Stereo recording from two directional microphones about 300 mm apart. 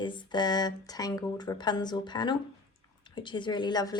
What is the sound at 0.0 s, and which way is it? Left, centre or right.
A woman's voice, centre.